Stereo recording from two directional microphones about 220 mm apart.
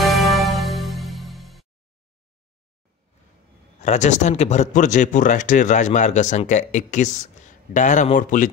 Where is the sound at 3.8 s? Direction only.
30° left (ahead or behind).